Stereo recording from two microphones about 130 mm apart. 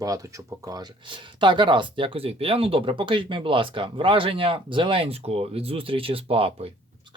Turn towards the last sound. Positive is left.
turn(degrees=-50)  # may be behind; listen again after turning